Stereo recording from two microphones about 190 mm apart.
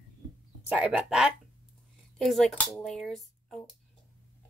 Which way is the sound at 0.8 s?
5° right (ahead or behind).